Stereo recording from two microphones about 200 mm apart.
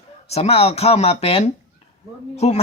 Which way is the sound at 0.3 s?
30° left (ahead or behind).